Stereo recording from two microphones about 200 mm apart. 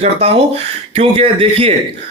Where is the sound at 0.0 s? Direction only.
30° right (ahead or behind).